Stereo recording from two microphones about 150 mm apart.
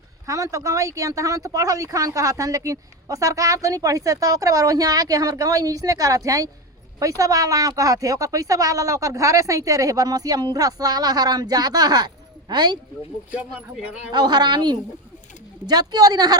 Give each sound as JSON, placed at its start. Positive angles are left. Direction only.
{"t": 0.3, "sound": "speech", "side_deg": -20}
{"t": 13.3, "sound": "speech", "side_deg": -10}
{"t": 14.1, "sound": "speech", "side_deg": -30}